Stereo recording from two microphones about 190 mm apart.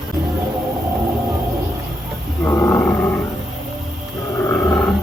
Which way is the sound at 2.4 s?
15° left (ahead or behind).